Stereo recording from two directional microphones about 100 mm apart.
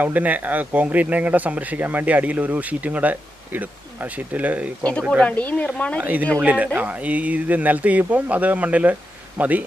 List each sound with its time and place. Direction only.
0.0 s speech: 15° right (ahead or behind)
4.8 s speech: 10° left (ahead or behind)
6.0 s speech: 15° right (ahead or behind)